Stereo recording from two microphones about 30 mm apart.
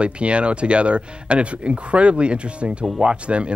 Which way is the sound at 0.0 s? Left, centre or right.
Right.